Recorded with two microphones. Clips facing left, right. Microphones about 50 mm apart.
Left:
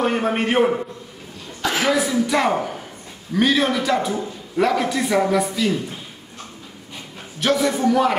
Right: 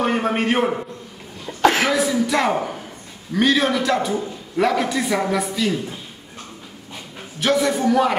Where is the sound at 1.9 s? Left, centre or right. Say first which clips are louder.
Even; centre.